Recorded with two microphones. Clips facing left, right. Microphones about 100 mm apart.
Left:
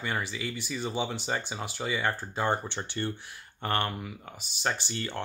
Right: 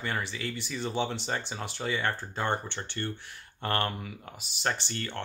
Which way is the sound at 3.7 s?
Centre (ahead or behind).